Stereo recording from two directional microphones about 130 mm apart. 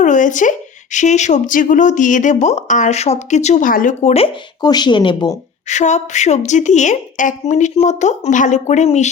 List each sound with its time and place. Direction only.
0.0 s speech: 75° left (ahead or behind)
4.1 s speech: 50° left (ahead or behind)
4.6 s speech: 35° left (ahead or behind)
5.6 s a woman's voice: 65° left (ahead or behind)